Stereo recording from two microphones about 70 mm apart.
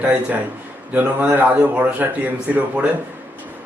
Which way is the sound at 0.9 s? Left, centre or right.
Right.